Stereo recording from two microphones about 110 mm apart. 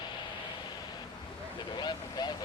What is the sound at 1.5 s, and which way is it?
Speech, 45° left (ahead or behind).